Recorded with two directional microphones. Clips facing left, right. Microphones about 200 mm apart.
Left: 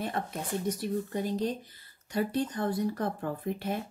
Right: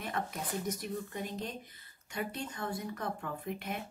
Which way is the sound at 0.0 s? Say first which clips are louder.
Left 4 dB; 30° left (ahead or behind).